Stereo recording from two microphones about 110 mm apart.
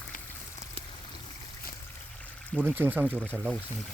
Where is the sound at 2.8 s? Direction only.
15° right (ahead or behind).